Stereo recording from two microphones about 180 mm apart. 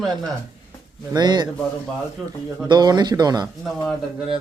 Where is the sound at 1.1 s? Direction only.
25° right (ahead or behind).